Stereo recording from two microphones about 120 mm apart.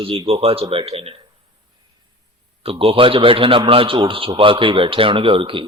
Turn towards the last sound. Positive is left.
turn(degrees=-45)  # may be behind; listen again after turning